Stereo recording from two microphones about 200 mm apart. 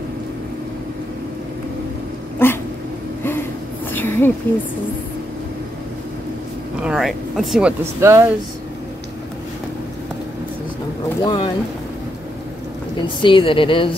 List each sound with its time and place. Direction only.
2.3 s cat: 10° left (ahead or behind)
3.9 s a sound: 10° left (ahead or behind)
6.8 s speech: centre (ahead or behind)
8.0 s speech: 15° right (ahead or behind)
11.2 s a woman's voice: 25° left (ahead or behind)
13.2 s a woman's voice: 25° left (ahead or behind)